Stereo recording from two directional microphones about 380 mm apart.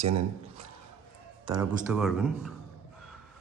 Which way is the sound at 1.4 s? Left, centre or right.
Centre.